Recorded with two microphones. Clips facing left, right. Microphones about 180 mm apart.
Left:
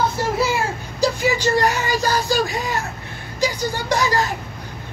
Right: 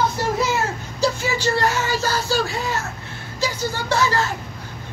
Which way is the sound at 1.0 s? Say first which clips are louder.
Left 2 dB; 15° left (ahead or behind).